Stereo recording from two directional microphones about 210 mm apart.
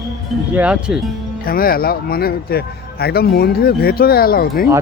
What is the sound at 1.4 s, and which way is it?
A man's voice, 45° left (ahead or behind).